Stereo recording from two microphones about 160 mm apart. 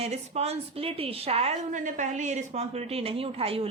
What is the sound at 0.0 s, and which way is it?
A woman's voice, 40° right (ahead or behind).